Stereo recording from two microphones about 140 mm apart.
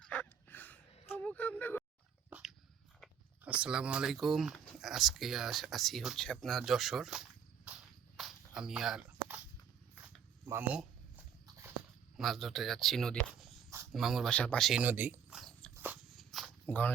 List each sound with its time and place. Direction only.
0.0 s a sound: 10° left (ahead or behind)
2.3 s dog: 10° right (ahead or behind)
3.4 s speech: 10° right (ahead or behind)
8.1 s walk: 5° right (ahead or behind)
10.4 s speech: 15° right (ahead or behind)
12.1 s speech: centre (ahead or behind)
14.8 s speech: 10° right (ahead or behind)
15.4 s biting: 5° left (ahead or behind)
15.7 s a sound: 15° right (ahead or behind)
16.1 s a sound: centre (ahead or behind)
16.6 s speech: 10° left (ahead or behind)